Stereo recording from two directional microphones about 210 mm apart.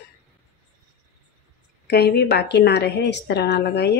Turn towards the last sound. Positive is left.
turn(degrees=55)  # may be behind; listen again after turning